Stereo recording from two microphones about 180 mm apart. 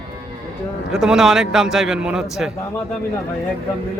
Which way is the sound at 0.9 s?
5° right (ahead or behind).